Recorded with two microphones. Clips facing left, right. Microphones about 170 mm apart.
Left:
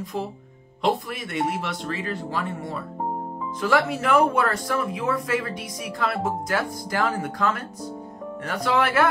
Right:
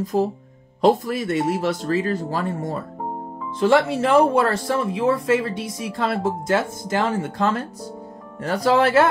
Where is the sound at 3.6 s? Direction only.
30° right (ahead or behind).